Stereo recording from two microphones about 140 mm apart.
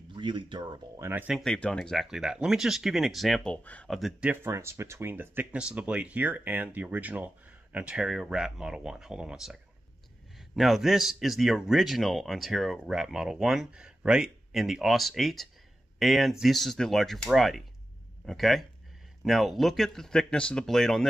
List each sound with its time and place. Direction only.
0.1 s speech: 35° right (ahead or behind)
1.0 s speech: 10° right (ahead or behind)
1.3 s speech: 5° left (ahead or behind)
4.3 s speech: 15° right (ahead or behind); by 21.1 s centre (ahead or behind)